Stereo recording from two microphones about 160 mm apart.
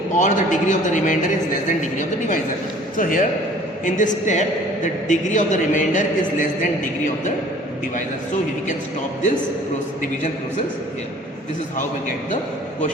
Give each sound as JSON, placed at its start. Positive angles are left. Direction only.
{"t": 0.2, "sound": "a man's voice", "side_deg": 50}